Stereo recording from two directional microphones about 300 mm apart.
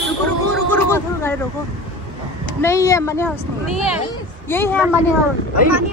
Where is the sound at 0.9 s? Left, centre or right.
Centre.